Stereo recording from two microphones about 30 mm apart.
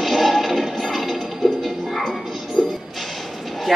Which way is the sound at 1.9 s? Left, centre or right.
Centre.